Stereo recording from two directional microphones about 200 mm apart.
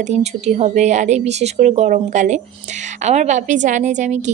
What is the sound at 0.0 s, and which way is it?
A woman's voice, 35° right (ahead or behind).